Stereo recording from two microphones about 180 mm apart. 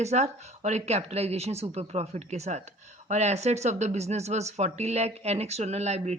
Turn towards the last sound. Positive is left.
turn(degrees=-35)  # may be behind; listen again after turning